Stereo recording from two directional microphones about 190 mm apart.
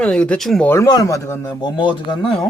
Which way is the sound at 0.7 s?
15° left (ahead or behind).